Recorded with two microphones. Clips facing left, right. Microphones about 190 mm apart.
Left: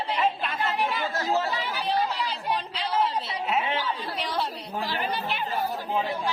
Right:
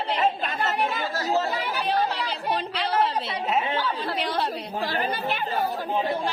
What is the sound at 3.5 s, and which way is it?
Chatter, 40° right (ahead or behind).